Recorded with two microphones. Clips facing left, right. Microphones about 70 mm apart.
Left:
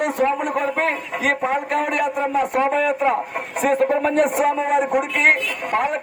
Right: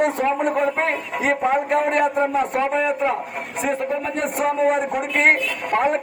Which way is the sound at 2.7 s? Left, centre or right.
Centre.